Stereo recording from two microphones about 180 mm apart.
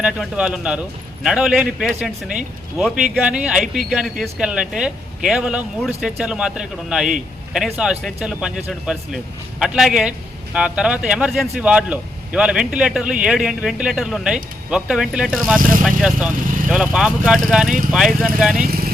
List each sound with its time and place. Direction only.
0.0 s speech: 5° right (ahead or behind)
18.5 s speech: 55° right (ahead or behind)